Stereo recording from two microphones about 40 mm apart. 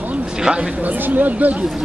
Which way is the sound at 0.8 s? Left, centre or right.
Right.